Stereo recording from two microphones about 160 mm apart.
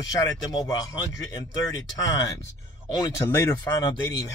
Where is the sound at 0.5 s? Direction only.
20° left (ahead or behind).